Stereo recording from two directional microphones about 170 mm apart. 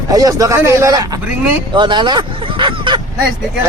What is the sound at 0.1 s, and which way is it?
Speech, 20° right (ahead or behind).